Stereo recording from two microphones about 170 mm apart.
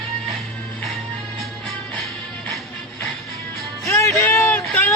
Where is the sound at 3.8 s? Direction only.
15° left (ahead or behind).